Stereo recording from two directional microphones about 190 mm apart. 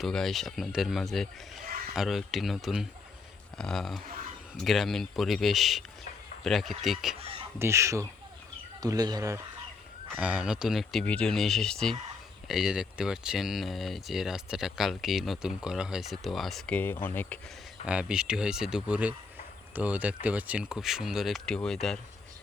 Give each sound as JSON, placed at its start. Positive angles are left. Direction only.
{"t": 0.0, "sound": "speech", "side_deg": 0}
{"t": 7.2, "sound": "speech", "side_deg": -30}
{"t": 7.6, "sound": "speech", "side_deg": -15}
{"t": 10.2, "sound": "speech", "side_deg": -5}
{"t": 17.8, "sound": "speech", "side_deg": -5}